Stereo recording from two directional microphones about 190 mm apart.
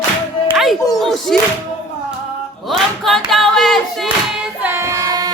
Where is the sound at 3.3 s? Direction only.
Centre (ahead or behind).